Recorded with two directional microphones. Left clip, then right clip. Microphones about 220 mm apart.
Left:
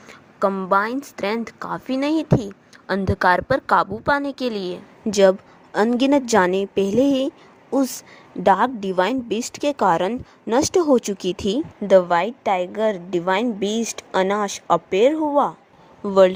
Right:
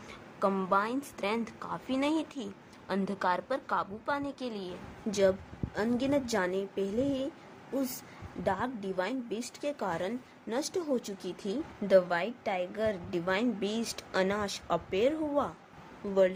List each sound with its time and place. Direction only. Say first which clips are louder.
0.1 s a woman's voice: left 9 dB; 30° left (ahead or behind)
8.4 s a woman's voice: left 16 dB; 40° left (ahead or behind)